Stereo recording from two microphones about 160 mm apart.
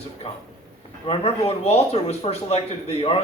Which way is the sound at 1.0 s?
35° left (ahead or behind).